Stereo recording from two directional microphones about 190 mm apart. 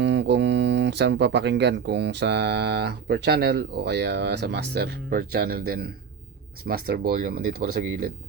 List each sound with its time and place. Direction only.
0.0 s speech: 65° right (ahead or behind)